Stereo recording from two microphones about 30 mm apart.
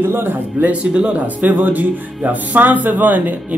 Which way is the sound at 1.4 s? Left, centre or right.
Right.